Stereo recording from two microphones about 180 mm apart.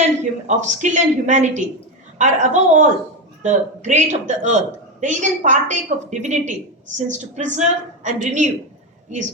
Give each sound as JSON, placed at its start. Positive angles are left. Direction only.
{"t": 0.4, "sound": "a woman's voice", "side_deg": -40}